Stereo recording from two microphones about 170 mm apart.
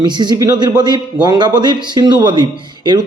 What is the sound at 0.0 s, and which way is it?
Speech, 25° right (ahead or behind).